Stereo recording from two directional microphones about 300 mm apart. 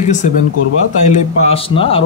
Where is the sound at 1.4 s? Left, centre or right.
Centre.